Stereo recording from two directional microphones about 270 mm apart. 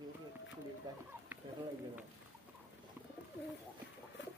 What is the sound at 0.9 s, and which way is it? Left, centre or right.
Speech, centre.